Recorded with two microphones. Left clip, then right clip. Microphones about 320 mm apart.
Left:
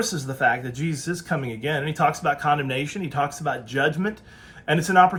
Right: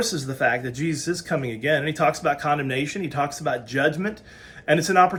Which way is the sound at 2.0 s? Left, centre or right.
Left.